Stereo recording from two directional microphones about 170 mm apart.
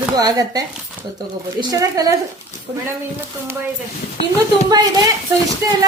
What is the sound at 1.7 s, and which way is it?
Speech, 20° right (ahead or behind).